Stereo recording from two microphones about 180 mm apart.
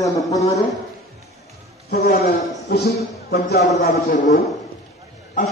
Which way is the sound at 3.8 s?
45° left (ahead or behind).